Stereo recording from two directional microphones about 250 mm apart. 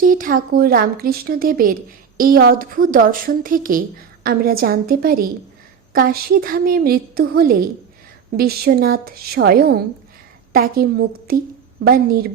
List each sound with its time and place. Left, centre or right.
0.0 s speech: right